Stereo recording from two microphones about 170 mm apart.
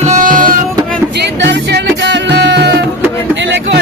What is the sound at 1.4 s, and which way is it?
Music, 90° right.